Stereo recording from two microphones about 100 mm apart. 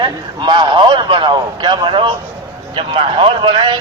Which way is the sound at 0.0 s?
50° right (ahead or behind).